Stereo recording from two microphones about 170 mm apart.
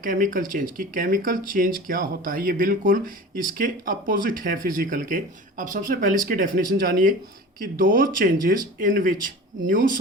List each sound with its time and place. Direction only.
0.0 s speech: 55° right (ahead or behind)